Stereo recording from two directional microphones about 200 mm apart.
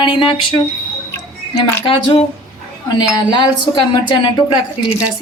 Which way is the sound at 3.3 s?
20° left (ahead or behind).